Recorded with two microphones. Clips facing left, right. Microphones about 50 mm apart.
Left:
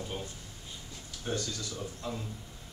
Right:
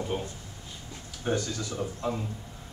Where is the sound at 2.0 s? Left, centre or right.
Right.